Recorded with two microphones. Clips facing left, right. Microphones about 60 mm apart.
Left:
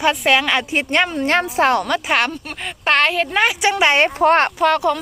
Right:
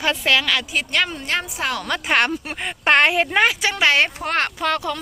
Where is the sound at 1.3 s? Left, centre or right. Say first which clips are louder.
Left 8 dB; left.